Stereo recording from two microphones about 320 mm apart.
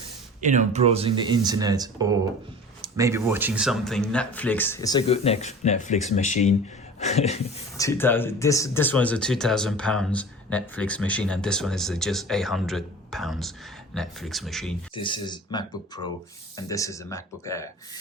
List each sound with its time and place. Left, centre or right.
0.4 s speech: right; by 7.9 s centre
7.9 s speech: centre
14.9 s speech: centre